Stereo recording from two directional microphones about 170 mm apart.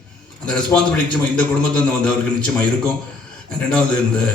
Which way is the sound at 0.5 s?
5° left (ahead or behind).